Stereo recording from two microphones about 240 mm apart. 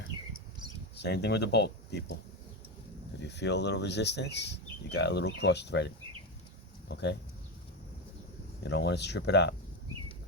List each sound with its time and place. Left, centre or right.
1.0 s speech: left
3.2 s speech: left
8.6 s speech: left